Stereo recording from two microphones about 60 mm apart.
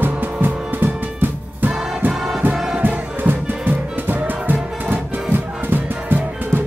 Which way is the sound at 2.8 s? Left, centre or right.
Right.